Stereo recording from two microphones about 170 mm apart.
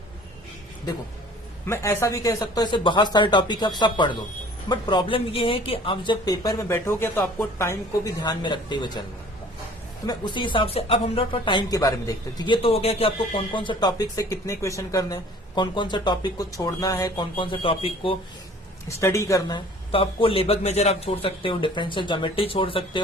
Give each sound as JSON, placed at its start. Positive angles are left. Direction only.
{"t": 1.6, "sound": "a woman's voice", "side_deg": 15}
{"t": 10.1, "sound": "speech", "side_deg": 25}
{"t": 18.9, "sound": "a woman's voice", "side_deg": 15}